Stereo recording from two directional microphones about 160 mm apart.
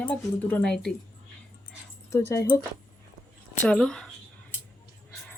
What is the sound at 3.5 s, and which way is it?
Speech, 5° left (ahead or behind).